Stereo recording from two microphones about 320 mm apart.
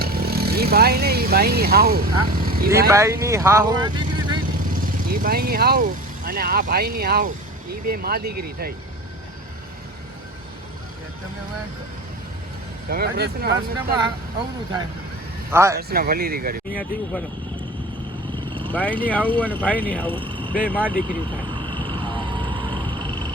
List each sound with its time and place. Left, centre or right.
0.0 s speech: right
2.6 s speech: centre
4.7 s speech: right
12.9 s speech: right
15.5 s speech: centre
15.8 s speech: right
18.7 s speech: centre
20.1 s vehicle: centre
20.5 s speech: centre
21.5 s a sound: centre